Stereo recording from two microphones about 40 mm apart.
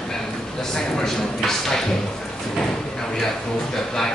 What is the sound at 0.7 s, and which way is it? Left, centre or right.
Speech, centre.